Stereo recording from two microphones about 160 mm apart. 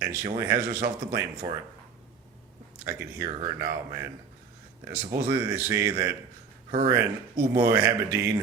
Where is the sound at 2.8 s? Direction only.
20° right (ahead or behind).